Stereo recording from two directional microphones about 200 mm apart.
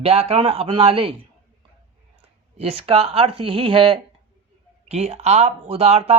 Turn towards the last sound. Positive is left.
turn(degrees=-30)  # may be behind; listen again after turning